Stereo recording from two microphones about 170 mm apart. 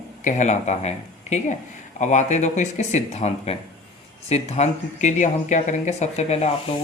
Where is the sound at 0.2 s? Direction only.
45° left (ahead or behind).